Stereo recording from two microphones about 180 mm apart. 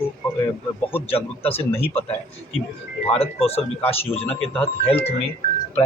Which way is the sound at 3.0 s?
35° left (ahead or behind).